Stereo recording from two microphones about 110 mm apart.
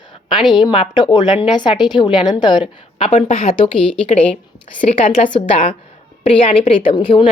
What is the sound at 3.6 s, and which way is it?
A woman's voice, 55° left (ahead or behind).